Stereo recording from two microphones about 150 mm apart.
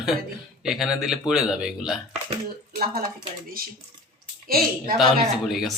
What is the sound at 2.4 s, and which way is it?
Speech, 80° right.